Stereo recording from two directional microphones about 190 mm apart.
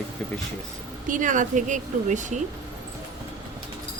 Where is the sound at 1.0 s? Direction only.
45° right (ahead or behind).